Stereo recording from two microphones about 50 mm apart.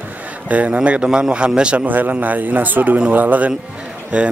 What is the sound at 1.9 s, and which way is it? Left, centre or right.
A man's voice, right.